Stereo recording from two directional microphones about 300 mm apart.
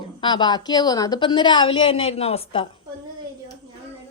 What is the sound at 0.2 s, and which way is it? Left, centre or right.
A woman's voice, centre.